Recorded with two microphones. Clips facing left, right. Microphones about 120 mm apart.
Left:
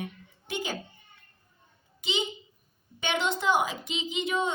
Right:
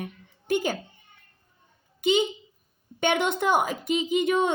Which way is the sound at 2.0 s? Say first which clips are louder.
Right 9 dB; 55° right (ahead or behind).